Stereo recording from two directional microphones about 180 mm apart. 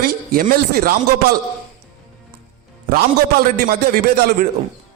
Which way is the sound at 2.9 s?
55° right (ahead or behind).